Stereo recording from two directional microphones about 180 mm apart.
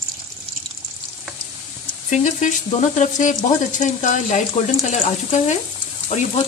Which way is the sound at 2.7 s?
40° left (ahead or behind).